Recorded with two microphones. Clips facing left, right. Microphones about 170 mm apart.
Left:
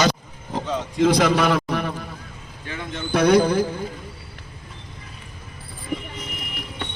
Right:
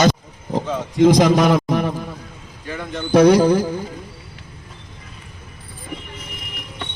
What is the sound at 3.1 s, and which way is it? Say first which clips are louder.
Speech: right 5 dB; 35° right (ahead or behind).